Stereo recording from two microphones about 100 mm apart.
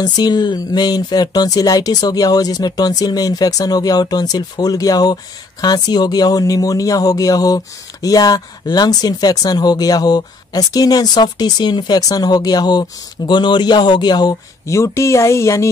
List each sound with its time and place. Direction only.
0.0 s speech: 45° left (ahead or behind)
14.7 s speech: 30° left (ahead or behind)